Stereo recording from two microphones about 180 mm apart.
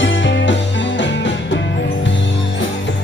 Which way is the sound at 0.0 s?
90° left.